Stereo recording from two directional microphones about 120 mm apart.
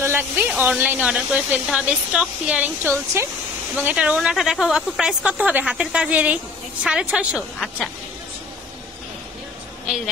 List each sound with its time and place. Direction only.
0.0 s a sound: 20° right (ahead or behind)
0.6 s speech: 15° right (ahead or behind)
2.8 s speech: 20° right (ahead or behind)